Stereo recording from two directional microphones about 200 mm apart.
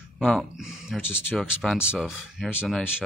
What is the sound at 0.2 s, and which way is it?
Speech, 5° left (ahead or behind).